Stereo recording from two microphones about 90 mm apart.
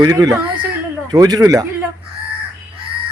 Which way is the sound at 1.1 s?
45° right (ahead or behind).